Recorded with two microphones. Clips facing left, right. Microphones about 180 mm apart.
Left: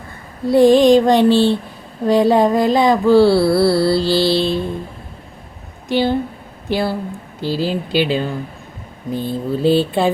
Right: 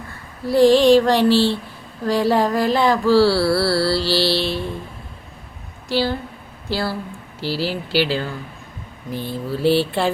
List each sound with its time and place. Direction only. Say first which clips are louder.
0.4 s music: left 3 dB; 20° left (ahead or behind)
5.9 s music: left 5 dB; 20° left (ahead or behind)